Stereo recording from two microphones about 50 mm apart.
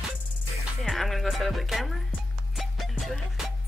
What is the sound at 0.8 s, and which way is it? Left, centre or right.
Speech, centre.